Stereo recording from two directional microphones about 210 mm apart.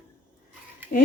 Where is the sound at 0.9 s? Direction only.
45° left (ahead or behind).